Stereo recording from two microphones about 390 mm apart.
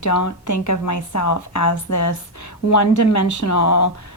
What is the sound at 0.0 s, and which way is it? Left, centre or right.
A woman's voice, left.